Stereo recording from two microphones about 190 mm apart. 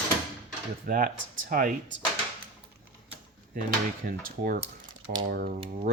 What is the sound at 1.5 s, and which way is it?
Speech, 50° right (ahead or behind).